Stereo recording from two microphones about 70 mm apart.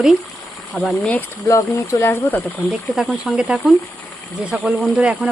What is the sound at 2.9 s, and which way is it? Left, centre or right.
Speech, centre.